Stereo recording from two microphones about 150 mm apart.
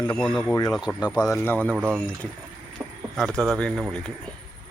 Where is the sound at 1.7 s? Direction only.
15° right (ahead or behind).